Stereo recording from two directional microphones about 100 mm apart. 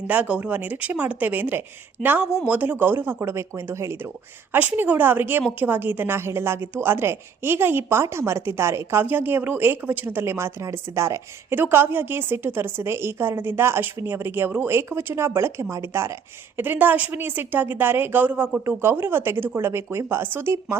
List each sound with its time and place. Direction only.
0.1 s a woman's voice: 15° right (ahead or behind)
4.5 s a woman's voice: 15° right (ahead or behind)